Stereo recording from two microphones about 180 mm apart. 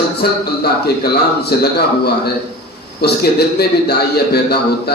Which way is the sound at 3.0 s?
65° left (ahead or behind).